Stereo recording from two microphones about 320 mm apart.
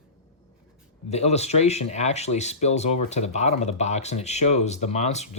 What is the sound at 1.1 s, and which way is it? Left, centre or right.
Speech, centre.